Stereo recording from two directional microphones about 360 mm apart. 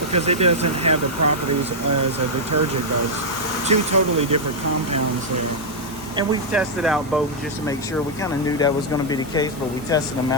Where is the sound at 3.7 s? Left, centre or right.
Centre.